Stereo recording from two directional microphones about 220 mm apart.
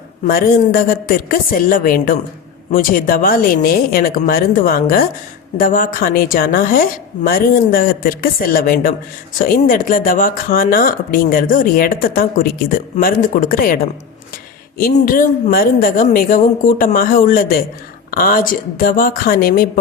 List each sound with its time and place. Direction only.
0.3 s speech: 40° left (ahead or behind)
14.8 s speech: 40° left (ahead or behind)